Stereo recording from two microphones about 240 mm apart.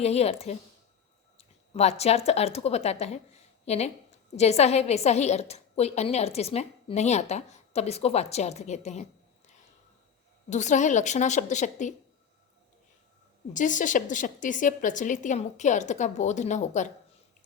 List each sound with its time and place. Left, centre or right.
0.0 s a woman's voice: left
10.5 s a woman's voice: left
13.5 s a woman's voice: left